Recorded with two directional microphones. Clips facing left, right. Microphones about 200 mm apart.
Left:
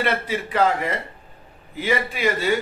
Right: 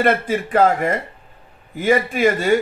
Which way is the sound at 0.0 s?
50° right (ahead or behind).